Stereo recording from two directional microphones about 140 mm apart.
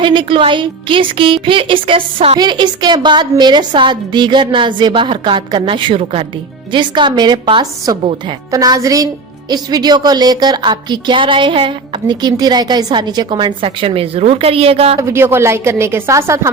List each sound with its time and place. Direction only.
0.0 s speech: 35° right (ahead or behind)
2.4 s a woman's voice: 30° right (ahead or behind)
14.9 s a woman's voice: 20° right (ahead or behind)